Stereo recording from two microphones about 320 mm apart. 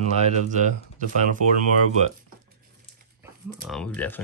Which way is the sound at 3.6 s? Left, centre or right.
Centre.